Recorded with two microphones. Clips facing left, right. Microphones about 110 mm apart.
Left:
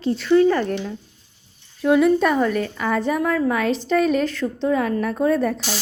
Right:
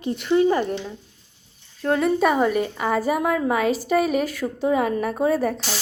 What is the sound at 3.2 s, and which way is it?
Speech, 20° right (ahead or behind).